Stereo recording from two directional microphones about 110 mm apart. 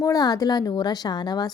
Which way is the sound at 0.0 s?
35° left (ahead or behind).